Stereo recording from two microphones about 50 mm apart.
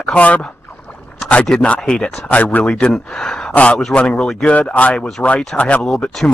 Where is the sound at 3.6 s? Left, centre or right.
Left.